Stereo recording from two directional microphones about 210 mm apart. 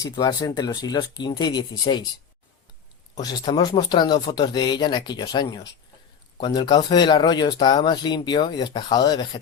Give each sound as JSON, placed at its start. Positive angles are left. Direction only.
{"t": 0.0, "sound": "speech", "side_deg": 15}
{"t": 3.2, "sound": "speech", "side_deg": 20}